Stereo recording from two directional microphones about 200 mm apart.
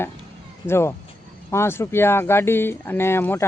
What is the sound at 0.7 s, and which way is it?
Speech, 10° left (ahead or behind).